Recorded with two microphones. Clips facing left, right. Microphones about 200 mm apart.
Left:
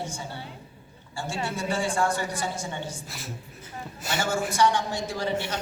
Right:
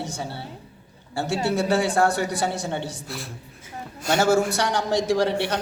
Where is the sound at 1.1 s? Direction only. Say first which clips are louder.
Right 8 dB; 70° right (ahead or behind).